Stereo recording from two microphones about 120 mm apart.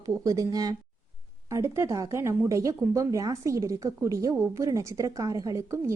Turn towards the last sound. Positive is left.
turn(degrees=-25)  # may be behind; listen again after turning